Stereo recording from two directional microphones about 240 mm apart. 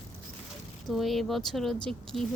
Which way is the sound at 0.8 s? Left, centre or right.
Centre.